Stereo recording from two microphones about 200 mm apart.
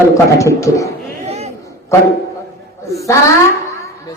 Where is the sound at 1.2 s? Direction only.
30° right (ahead or behind).